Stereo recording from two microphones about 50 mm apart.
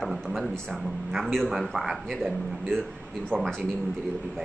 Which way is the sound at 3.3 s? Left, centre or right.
Right.